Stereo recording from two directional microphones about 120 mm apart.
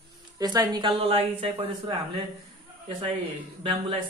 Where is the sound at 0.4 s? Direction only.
30° right (ahead or behind); by 1.7 s 55° right (ahead or behind).